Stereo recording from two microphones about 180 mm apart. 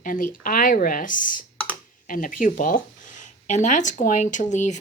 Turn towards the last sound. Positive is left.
turn(degrees=40)  # may be behind; listen again after turning